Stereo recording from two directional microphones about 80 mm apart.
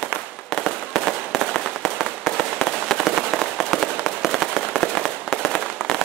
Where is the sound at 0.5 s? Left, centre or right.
Centre.